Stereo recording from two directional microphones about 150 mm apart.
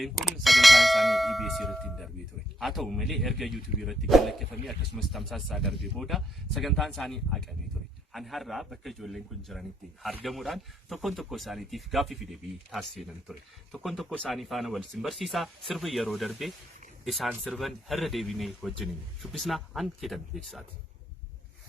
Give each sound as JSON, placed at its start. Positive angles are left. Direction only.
{"t": 0.0, "sound": "speech", "side_deg": 0}